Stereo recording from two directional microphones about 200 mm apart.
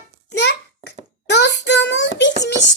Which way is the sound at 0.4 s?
60° left (ahead or behind).